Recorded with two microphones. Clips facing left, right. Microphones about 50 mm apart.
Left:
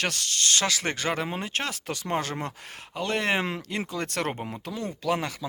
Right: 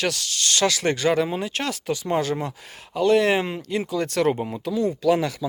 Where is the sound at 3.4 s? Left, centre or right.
Left.